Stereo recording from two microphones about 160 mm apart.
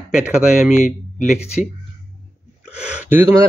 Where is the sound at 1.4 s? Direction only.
45° left (ahead or behind).